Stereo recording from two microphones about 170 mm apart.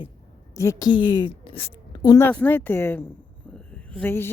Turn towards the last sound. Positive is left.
turn(degrees=10)  # may be behind; listen again after turning